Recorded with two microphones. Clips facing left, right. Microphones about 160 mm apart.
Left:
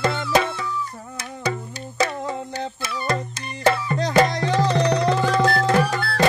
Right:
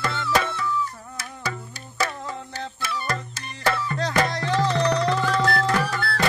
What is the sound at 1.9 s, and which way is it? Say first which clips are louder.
Music: left 4 dB; 20° left (ahead or behind).